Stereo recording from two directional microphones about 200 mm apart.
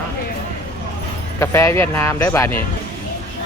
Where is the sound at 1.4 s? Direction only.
15° left (ahead or behind).